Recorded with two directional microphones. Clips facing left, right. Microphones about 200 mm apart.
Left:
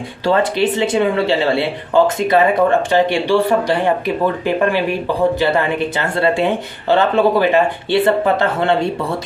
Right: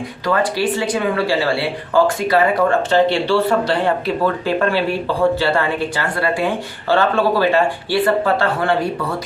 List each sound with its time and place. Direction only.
0.3 s speech: 25° left (ahead or behind)